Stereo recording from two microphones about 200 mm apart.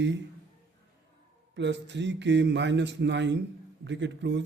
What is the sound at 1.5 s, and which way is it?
A man's voice, 60° right (ahead or behind).